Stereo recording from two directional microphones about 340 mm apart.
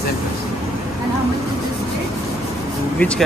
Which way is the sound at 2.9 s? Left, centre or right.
Centre.